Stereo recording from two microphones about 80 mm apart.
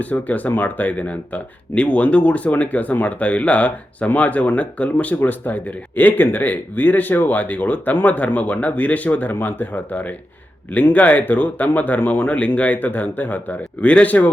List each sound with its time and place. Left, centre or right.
0.0 s speech: centre